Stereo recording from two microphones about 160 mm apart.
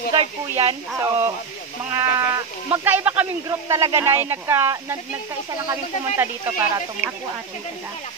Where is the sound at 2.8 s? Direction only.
10° right (ahead or behind).